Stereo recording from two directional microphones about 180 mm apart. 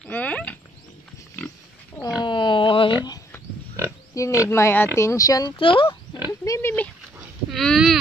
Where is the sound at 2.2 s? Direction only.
25° left (ahead or behind).